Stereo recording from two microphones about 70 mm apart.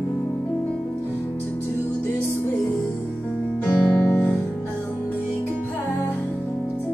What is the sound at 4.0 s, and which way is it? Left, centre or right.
Music, left.